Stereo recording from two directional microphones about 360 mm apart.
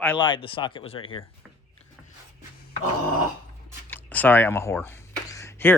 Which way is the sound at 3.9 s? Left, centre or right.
Centre.